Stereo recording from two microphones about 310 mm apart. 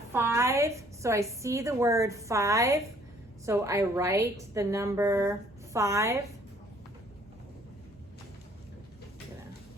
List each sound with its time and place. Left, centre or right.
0.1 s a woman's voice: centre